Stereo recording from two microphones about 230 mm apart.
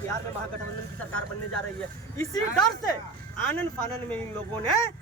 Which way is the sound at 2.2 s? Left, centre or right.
Centre.